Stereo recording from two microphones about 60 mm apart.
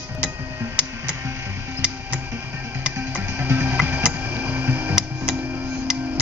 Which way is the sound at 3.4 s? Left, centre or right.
Right.